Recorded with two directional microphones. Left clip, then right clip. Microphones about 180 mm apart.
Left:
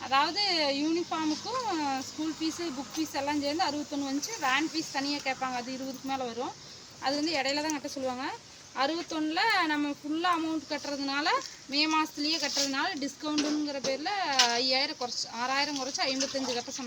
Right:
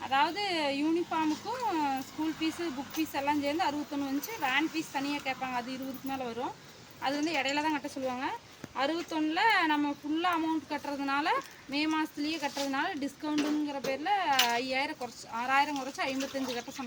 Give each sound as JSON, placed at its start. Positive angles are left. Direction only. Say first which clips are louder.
{"t": 0.1, "sound": "speech", "louder": "left 2 dB", "side_deg": -10}